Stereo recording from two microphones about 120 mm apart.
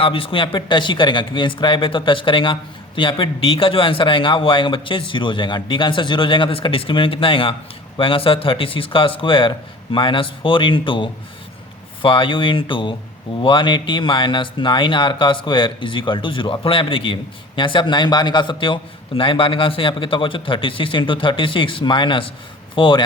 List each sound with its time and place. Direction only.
0.0 s speech: 50° left (ahead or behind)